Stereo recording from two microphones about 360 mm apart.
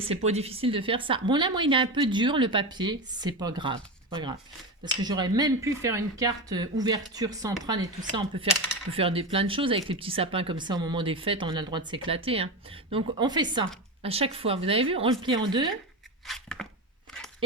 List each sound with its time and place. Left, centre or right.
0.0 s speech: centre
16.2 s chopping: centre
17.1 s a sound: centre